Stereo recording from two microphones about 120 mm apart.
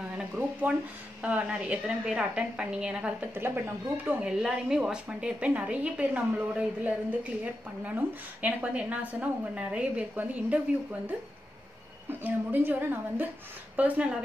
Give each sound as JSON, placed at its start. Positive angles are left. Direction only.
{"t": 0.2, "sound": "frying", "side_deg": -15}
{"t": 1.2, "sound": "a woman's voice", "side_deg": -10}